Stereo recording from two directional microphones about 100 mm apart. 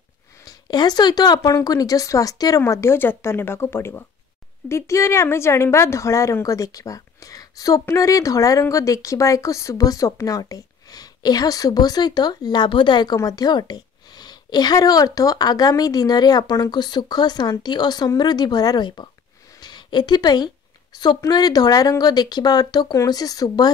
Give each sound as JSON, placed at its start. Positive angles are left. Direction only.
{"t": 0.5, "sound": "speech", "side_deg": 45}
{"t": 2.6, "sound": "speech", "side_deg": 25}